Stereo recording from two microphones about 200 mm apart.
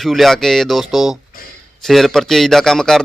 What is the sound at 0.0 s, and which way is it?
A man's voice, centre (ahead or behind).